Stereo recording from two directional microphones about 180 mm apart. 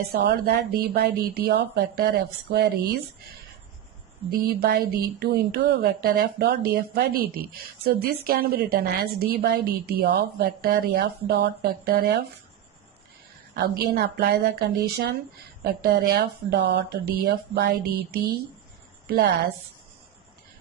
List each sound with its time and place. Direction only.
0.1 s speech: 60° right (ahead or behind)
4.3 s speech: 60° right (ahead or behind)
13.5 s a woman's voice: 60° right (ahead or behind)